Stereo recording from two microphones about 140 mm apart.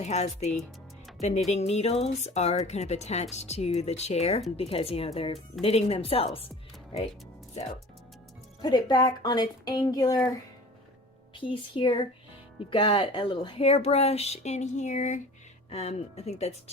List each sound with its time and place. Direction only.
0.0 s speech: 55° left (ahead or behind)
8.6 s speech: 35° left (ahead or behind)
11.3 s speech: 35° left (ahead or behind); by 15.2 s 60° left (ahead or behind)
15.7 s speech: 50° left (ahead or behind)